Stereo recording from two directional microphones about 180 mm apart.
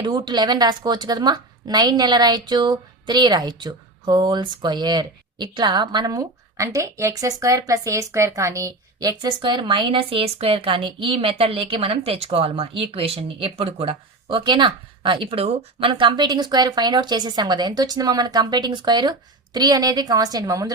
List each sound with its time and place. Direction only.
0.0 s a woman's voice: 25° right (ahead or behind)